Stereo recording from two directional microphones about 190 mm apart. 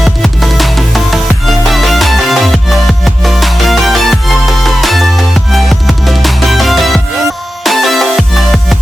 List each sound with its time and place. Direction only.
0.0 s music: centre (ahead or behind)